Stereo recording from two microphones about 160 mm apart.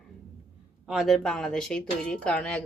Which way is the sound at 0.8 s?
Centre (ahead or behind).